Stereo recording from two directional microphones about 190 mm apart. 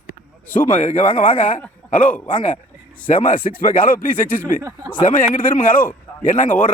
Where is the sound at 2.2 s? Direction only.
40° left (ahead or behind).